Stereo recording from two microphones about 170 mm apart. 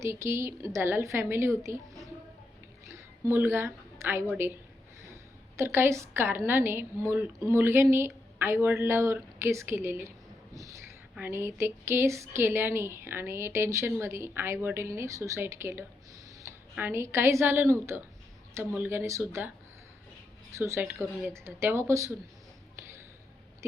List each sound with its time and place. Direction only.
0.0 s a woman's voice: 15° right (ahead or behind)
2.8 s a sound: 15° right (ahead or behind)
5.1 s a woman's voice: 15° right (ahead or behind)
10.5 s a sound: 20° right (ahead or behind)
11.1 s a woman's voice: 10° right (ahead or behind)
20.5 s a woman's voice: 15° right (ahead or behind)